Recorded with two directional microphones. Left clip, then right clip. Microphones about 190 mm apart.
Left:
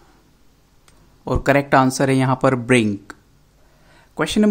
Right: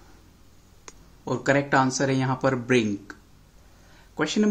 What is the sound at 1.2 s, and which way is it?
Speech, 35° left (ahead or behind).